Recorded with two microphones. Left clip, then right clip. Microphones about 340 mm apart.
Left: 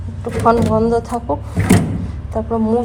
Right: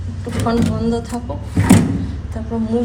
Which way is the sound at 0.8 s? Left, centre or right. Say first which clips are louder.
Left 6 dB; centre.